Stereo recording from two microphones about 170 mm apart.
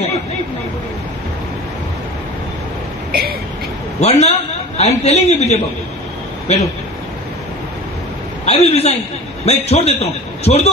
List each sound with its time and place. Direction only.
3.1 s vehicle: 65° right (ahead or behind)
4.0 s a man's voice: 40° left (ahead or behind)
8.5 s a man's voice: 35° left (ahead or behind)